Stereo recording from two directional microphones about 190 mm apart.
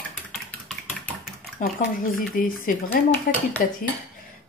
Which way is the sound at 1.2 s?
50° left (ahead or behind).